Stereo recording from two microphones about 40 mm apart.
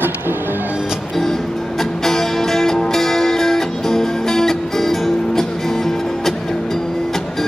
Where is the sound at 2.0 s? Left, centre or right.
Centre.